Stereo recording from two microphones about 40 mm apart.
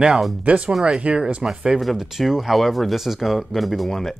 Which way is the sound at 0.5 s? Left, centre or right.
Right.